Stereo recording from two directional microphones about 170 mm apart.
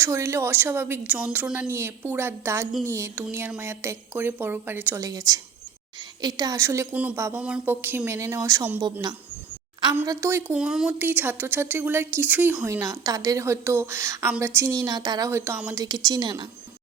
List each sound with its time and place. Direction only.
0.0 s speech: 15° right (ahead or behind)
8.8 s speech: 25° right (ahead or behind)
9.9 s speech: 15° right (ahead or behind)
16.0 s speech: 25° right (ahead or behind)